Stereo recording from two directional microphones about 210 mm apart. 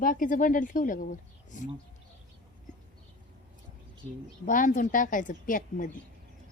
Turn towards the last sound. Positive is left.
turn(degrees=40)  # may be behind; listen again after turning